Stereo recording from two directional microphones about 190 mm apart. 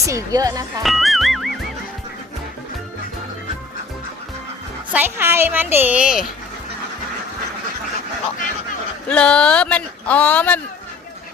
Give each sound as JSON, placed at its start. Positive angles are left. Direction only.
{"t": 0.0, "sound": "speech", "side_deg": -15}
{"t": 0.8, "sound": "music", "side_deg": 0}
{"t": 4.9, "sound": "a woman's voice", "side_deg": -10}
{"t": 9.0, "sound": "speech", "side_deg": 5}